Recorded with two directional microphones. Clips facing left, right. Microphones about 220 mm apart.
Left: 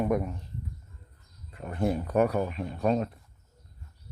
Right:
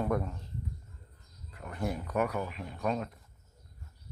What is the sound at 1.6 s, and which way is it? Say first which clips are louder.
Speech: left 7 dB; 25° left (ahead or behind).